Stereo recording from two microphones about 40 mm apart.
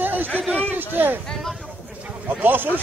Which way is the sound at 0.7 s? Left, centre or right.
Right.